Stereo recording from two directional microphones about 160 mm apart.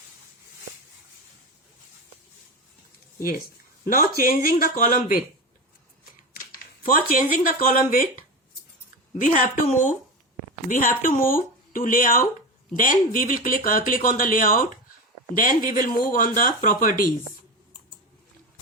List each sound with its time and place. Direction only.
3.2 s speech: 60° left (ahead or behind)
6.4 s speech: 60° left (ahead or behind)
9.1 s speech: 55° left (ahead or behind)